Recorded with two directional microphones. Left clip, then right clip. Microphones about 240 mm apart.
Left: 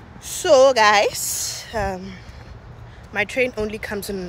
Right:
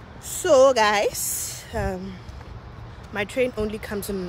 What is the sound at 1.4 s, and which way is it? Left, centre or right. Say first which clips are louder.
A woman's voice: left 5 dB; centre.